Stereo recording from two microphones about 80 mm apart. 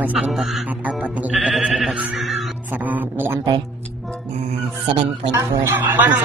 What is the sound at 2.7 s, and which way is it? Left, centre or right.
Speech, right.